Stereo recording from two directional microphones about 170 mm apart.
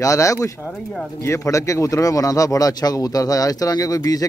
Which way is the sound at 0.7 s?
5° left (ahead or behind).